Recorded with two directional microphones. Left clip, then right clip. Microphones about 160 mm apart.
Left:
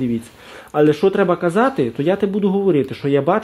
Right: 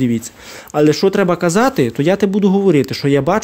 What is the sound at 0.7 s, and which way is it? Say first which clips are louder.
Speech: right 2 dB; 20° right (ahead or behind).